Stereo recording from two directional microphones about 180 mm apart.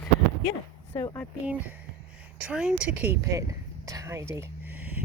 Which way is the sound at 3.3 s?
20° right (ahead or behind).